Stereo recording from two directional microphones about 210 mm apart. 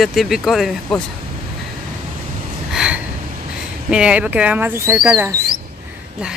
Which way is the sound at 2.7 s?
5° right (ahead or behind).